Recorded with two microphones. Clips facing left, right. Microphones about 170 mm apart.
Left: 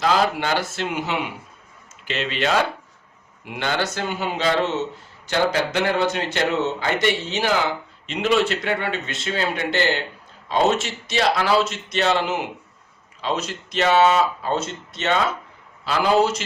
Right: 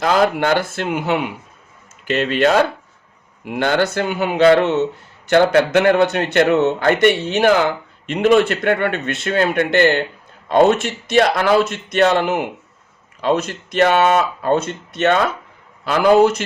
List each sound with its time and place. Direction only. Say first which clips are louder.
0.0 s a man's voice: right 4 dB; 55° right (ahead or behind)